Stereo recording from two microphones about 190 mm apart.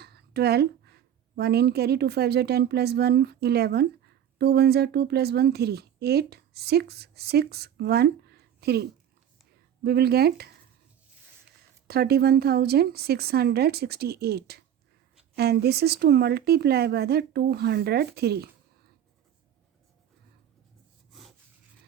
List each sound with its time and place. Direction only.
0.0 s speech: 60° right (ahead or behind)
11.9 s speech: 55° right (ahead or behind)
21.1 s rub: centre (ahead or behind)